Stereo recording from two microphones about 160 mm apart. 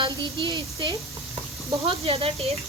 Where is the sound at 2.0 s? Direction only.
40° right (ahead or behind).